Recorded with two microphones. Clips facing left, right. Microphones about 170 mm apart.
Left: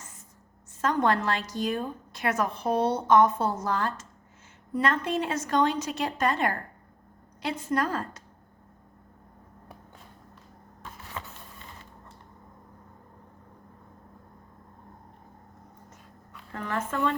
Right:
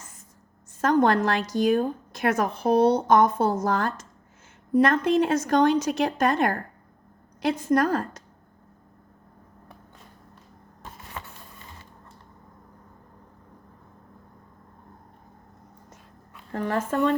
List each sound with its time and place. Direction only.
0.8 s speech: 45° right (ahead or behind)
16.5 s speech: 40° right (ahead or behind)